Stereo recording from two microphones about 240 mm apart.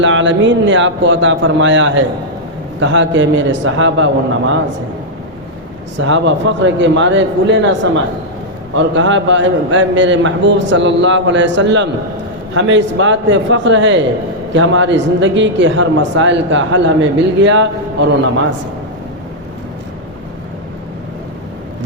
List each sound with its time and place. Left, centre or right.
0.0 s speech: right
6.1 s speech: right